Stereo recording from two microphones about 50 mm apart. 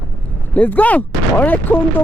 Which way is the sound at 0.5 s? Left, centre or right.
Left.